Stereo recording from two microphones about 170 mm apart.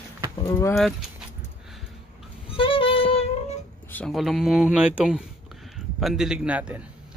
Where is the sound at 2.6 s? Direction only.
30° left (ahead or behind).